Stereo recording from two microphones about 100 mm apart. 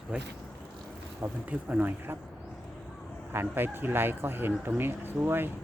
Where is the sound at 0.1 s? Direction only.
10° right (ahead or behind).